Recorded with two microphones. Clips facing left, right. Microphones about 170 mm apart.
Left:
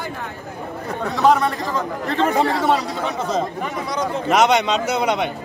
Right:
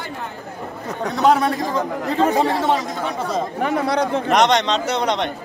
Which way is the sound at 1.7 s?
10° right (ahead or behind).